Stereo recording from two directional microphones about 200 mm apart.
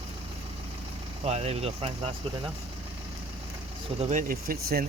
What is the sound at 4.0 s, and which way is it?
Speech, 40° right (ahead or behind).